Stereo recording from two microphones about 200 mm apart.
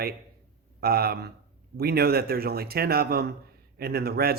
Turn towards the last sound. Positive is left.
turn(degrees=-50)  # may be behind; listen again after turning